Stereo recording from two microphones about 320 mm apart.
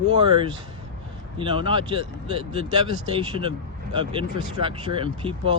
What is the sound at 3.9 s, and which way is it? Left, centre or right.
Speech, centre.